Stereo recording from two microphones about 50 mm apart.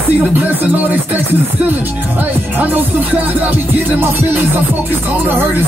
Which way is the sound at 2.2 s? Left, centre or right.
Right.